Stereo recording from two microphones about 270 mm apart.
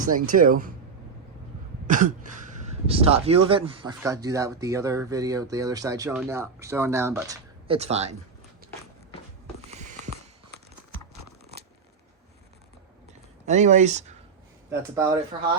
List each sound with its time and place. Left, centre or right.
0.0 s speech: right
1.9 s speech: right
13.4 s speech: right
14.7 s speech: centre